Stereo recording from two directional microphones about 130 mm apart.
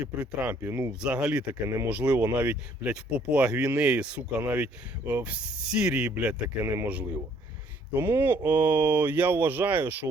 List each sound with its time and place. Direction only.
0.0 s speech: 10° right (ahead or behind)
1.6 s speech: 20° right (ahead or behind)